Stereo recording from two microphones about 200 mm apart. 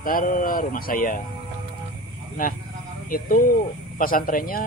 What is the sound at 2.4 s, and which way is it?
A man's voice, 45° left (ahead or behind).